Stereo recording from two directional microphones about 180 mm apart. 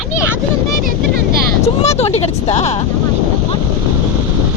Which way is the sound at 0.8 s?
55° right (ahead or behind).